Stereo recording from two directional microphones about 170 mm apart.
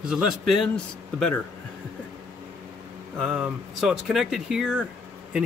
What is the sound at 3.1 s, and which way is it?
Speech, 5° right (ahead or behind).